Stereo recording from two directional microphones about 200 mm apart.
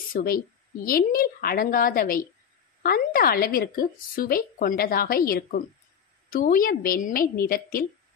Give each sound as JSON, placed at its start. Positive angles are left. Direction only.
{"t": 0.1, "sound": "a woman's voice", "side_deg": 45}